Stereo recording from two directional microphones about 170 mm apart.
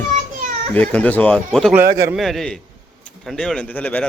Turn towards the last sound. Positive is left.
turn(degrees=10)  # may be behind; listen again after turning